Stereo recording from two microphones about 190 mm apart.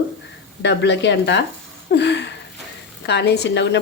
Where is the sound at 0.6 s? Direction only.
70° left (ahead or behind).